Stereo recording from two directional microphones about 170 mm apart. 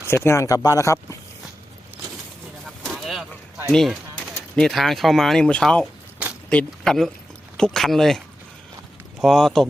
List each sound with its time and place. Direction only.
0.0 s speech: 15° left (ahead or behind)
2.8 s vehicle: centre (ahead or behind)
3.7 s speech: centre (ahead or behind)
9.2 s speech: centre (ahead or behind)